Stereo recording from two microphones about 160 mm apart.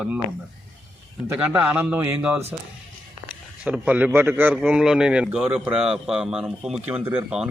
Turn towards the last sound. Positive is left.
turn(degrees=-10)  # may be behind; listen again after turning